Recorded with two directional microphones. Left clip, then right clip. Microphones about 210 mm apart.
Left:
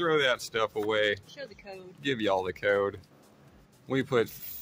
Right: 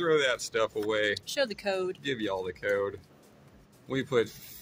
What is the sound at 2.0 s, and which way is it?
Speech, 20° left (ahead or behind).